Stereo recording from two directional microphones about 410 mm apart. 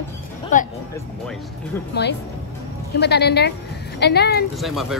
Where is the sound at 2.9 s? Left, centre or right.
Left.